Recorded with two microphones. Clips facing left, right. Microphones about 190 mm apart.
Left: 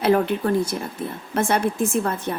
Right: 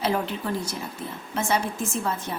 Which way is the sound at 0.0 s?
55° left (ahead or behind).